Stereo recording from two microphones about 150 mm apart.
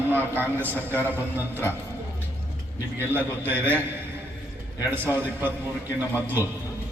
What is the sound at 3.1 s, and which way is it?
Speech, 15° right (ahead or behind).